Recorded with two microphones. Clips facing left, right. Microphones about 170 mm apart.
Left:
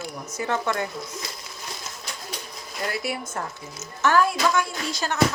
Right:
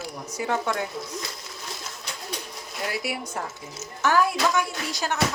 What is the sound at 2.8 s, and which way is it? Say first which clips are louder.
A woman's voice: left 1 dB; 10° right (ahead or behind).